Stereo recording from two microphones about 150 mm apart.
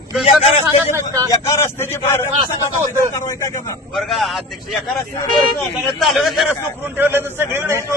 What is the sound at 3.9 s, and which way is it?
Speech, centre (ahead or behind).